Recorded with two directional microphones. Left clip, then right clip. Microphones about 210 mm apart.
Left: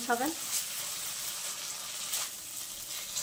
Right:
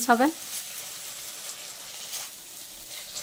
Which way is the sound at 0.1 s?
50° right (ahead or behind).